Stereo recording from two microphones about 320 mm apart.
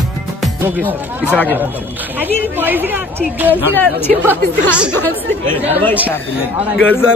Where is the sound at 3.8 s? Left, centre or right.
Centre.